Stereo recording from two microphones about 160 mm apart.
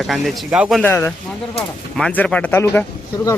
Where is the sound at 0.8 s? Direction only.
15° left (ahead or behind).